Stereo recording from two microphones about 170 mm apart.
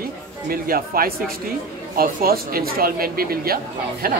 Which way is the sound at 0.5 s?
60° right (ahead or behind).